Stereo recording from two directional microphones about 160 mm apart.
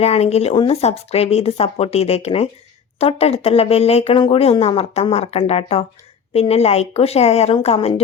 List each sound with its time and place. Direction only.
0.0 s speech: 40° left (ahead or behind)